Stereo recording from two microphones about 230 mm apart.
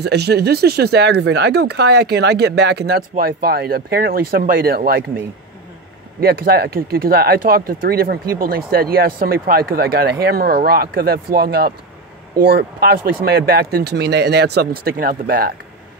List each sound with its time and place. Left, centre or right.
0.0 s speech: right
6.2 s speech: right